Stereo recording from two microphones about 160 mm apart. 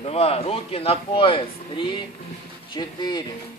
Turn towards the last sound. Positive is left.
turn(degrees=25)  # may be behind; listen again after turning